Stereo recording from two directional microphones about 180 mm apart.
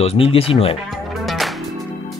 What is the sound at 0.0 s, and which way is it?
Speech, 35° left (ahead or behind).